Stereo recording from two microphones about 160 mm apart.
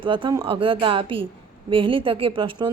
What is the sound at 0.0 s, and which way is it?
A woman's voice, 30° right (ahead or behind).